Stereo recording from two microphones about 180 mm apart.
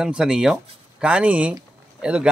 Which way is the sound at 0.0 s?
5° right (ahead or behind).